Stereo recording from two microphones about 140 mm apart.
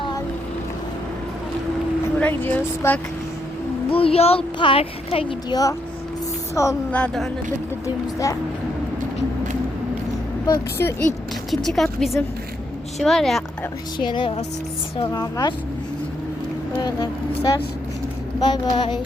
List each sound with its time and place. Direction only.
2.1 s speech: 10° left (ahead or behind)
3.8 s a child's voice: 40° left (ahead or behind)
6.5 s speech: 20° left (ahead or behind)
6.9 s speech: 5° left (ahead or behind)
10.4 s speech: 20° left (ahead or behind)
11.5 s speech: centre (ahead or behind)
14.0 s a child's voice: 35° left (ahead or behind)
16.7 s speech: 30° left (ahead or behind)